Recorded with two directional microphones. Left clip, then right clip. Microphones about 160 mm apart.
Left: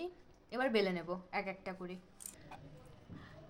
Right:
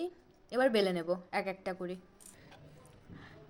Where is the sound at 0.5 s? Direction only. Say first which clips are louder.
Right 5 dB; 25° right (ahead or behind).